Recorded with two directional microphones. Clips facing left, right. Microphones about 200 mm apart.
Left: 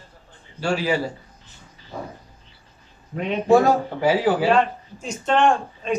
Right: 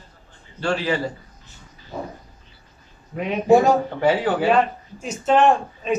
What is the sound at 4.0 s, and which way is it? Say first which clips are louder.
Speech: even; 5° left (ahead or behind).